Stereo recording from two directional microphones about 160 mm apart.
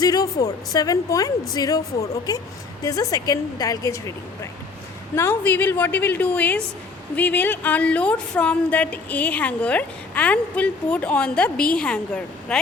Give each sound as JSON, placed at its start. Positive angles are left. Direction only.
{"t": 0.0, "sound": "a woman's voice", "side_deg": 25}
{"t": 5.1, "sound": "a woman's voice", "side_deg": 15}